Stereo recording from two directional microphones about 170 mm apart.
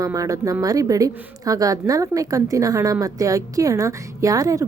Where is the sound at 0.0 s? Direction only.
20° right (ahead or behind).